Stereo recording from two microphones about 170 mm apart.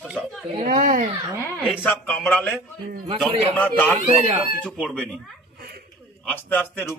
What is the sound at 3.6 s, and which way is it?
A man's voice, 10° left (ahead or behind).